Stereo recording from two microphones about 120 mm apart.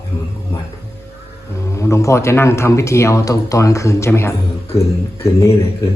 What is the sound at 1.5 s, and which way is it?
Speech, 25° left (ahead or behind).